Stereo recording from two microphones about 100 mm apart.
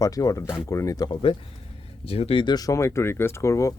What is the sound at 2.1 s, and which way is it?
Speech, 75° left (ahead or behind).